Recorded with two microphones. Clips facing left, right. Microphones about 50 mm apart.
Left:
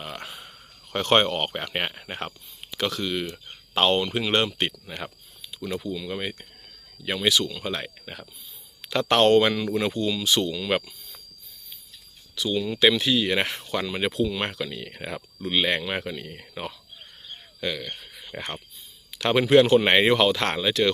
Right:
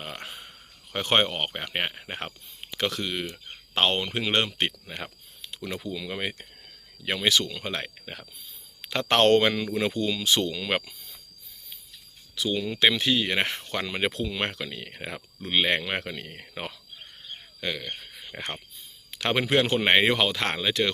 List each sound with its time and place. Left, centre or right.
0.0 s a sound: right
1.0 s speech: centre
2.0 s speech: centre
2.7 s speech: right
6.1 s speech: right
7.6 s speech: right
9.4 s speech: right
12.4 s speech: right
14.6 s speech: right
15.8 s speech: right
17.6 s speech: right
18.3 s speech: centre
19.2 s speech: right
19.8 s speech: centre